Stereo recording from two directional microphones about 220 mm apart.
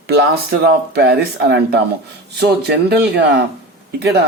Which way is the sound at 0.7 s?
45° right (ahead or behind).